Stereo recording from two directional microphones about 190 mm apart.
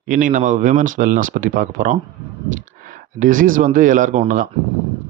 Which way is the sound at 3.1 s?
45° right (ahead or behind).